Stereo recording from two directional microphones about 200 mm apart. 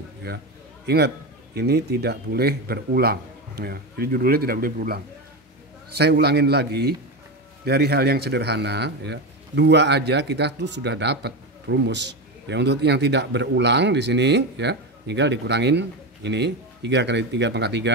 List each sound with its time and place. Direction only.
0.3 s a man's voice: 55° right (ahead or behind)